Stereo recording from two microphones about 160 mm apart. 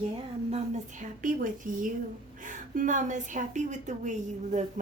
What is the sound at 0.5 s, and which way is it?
A woman's voice, 55° right (ahead or behind).